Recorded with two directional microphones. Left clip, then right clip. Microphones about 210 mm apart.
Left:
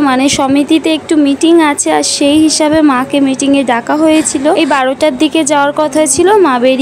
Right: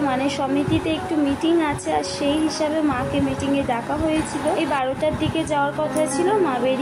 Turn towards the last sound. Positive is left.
turn(degrees=50)  # may be behind; listen again after turning